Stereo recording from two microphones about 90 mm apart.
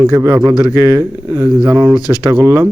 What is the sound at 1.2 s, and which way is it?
Speech, 25° right (ahead or behind).